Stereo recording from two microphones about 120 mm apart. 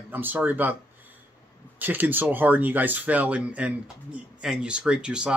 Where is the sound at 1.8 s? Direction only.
15° right (ahead or behind).